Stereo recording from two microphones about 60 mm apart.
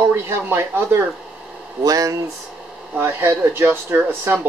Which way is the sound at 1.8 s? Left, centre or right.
Right.